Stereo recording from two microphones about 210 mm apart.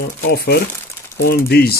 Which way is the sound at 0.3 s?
50° left (ahead or behind).